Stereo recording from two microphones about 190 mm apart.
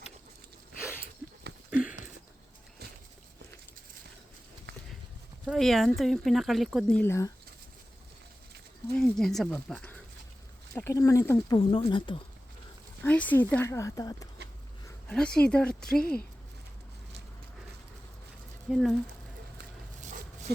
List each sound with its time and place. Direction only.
0.8 s a sound: 5° right (ahead or behind)
5.5 s a woman's voice: centre (ahead or behind)
7.0 s speech: 15° left (ahead or behind)
8.9 s speech: 5° left (ahead or behind); by 12.2 s 25° left (ahead or behind)
13.1 s speech: 10° left (ahead or behind)
15.1 s a woman's voice: 5° left (ahead or behind)
18.7 s a woman's voice: centre (ahead or behind)